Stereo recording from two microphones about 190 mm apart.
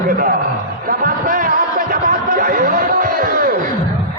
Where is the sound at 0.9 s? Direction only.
45° right (ahead or behind).